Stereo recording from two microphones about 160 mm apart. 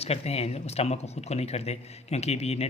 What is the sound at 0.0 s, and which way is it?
Speech, 40° left (ahead or behind).